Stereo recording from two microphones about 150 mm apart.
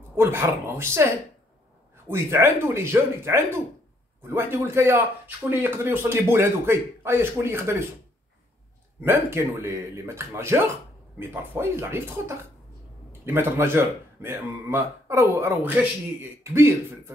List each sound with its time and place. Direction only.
0.1 s speech: 15° right (ahead or behind)
9.0 s speech: 15° right (ahead or behind)